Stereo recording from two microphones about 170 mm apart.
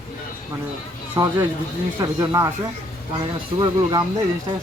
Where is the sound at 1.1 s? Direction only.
15° right (ahead or behind).